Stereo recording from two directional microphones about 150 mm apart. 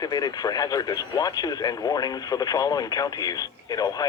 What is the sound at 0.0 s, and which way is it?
Speech, 25° left (ahead or behind).